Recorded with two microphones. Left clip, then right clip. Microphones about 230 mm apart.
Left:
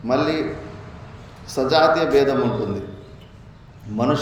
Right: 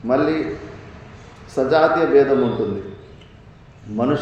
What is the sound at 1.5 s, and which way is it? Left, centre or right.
Speech, left.